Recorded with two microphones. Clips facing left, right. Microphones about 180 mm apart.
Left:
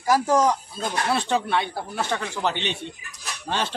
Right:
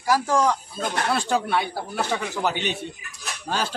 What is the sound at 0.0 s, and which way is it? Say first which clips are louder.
Speech: left 1 dB; 20° left (ahead or behind).